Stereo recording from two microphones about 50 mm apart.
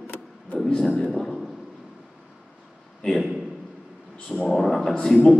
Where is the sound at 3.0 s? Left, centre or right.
Centre.